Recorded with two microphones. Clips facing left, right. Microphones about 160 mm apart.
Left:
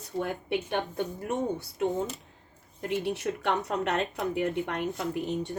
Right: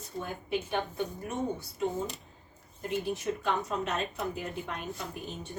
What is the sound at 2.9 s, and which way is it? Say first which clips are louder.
Speech: left 2 dB; 75° left (ahead or behind).